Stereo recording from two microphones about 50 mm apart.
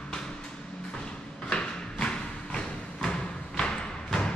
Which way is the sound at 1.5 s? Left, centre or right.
Centre.